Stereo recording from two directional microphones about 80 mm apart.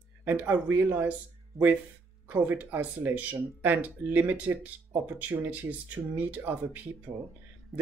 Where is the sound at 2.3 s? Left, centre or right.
Right.